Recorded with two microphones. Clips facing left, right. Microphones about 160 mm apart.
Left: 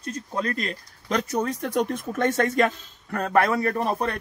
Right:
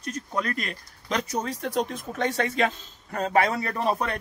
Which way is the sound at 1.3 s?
50° left (ahead or behind).